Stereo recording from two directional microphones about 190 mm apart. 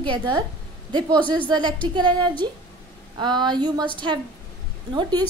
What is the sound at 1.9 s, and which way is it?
A woman's voice, 25° right (ahead or behind).